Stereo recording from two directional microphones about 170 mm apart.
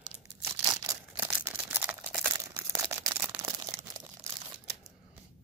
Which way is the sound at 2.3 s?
20° right (ahead or behind).